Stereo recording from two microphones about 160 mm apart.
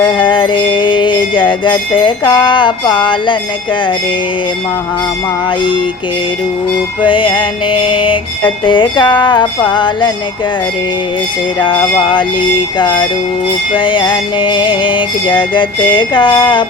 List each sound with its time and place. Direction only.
0.0 s music: 30° left (ahead or behind)
5.5 s music: 30° left (ahead or behind)
7.0 s music: 30° left (ahead or behind)
11.6 s music: 30° left (ahead or behind)